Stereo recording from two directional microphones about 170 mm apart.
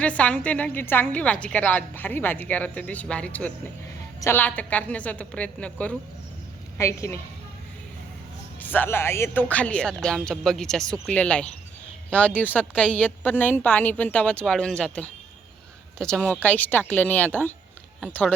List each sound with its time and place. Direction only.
0.0 s a woman's voice: 5° left (ahead or behind)
8.6 s a woman's voice: 10° left (ahead or behind)